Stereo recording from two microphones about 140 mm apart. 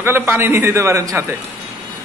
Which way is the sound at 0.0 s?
15° right (ahead or behind).